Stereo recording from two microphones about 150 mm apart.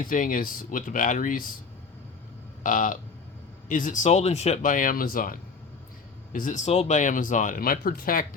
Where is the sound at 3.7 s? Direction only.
60° left (ahead or behind).